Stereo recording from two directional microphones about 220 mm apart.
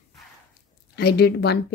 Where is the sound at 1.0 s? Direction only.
45° left (ahead or behind).